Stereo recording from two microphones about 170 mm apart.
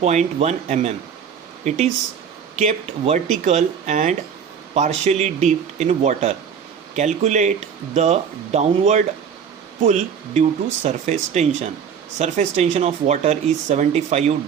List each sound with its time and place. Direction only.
0.0 s speech: 40° right (ahead or behind)